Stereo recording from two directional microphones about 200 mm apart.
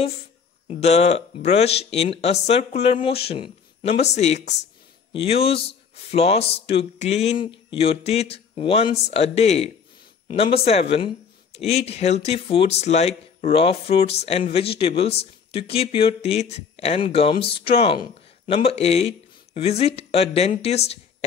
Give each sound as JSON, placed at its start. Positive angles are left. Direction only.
{"t": 0.7, "sound": "speech", "side_deg": 35}